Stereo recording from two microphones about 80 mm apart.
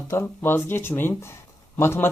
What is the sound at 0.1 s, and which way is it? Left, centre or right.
Speech, left.